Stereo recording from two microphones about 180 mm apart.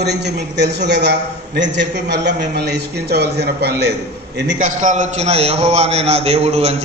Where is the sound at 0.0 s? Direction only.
70° right (ahead or behind).